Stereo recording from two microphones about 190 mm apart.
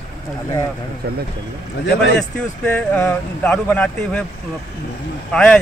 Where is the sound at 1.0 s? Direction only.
55° right (ahead or behind).